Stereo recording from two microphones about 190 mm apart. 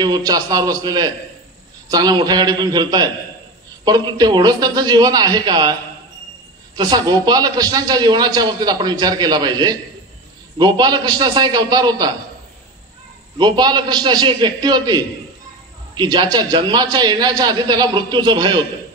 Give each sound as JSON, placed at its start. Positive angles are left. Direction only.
{"t": 0.0, "sound": "a man's voice", "side_deg": -20}
{"t": 13.4, "sound": "a man's voice", "side_deg": -25}